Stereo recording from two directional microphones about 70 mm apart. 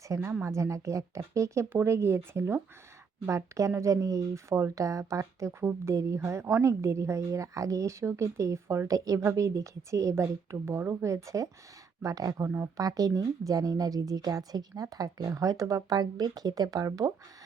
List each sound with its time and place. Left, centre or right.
0.1 s speech: right
8.9 s speech: right
12.0 s a woman's voice: right